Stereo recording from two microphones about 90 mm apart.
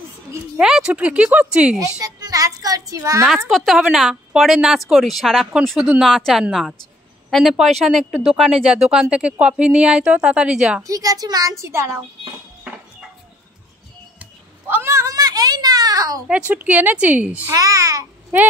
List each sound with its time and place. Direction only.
0.6 s speech: 5° right (ahead or behind)
1.8 s a child's voice: 40° right (ahead or behind)
3.4 s speech: centre (ahead or behind)
10.8 s a child's voice: 40° right (ahead or behind)
14.7 s a sound: 30° right (ahead or behind)
16.3 s speech: 15° right (ahead or behind)
17.5 s a child's voice: 35° right (ahead or behind)